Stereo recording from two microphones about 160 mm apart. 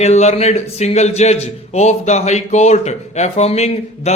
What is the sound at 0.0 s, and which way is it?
A man's voice, 45° left (ahead or behind).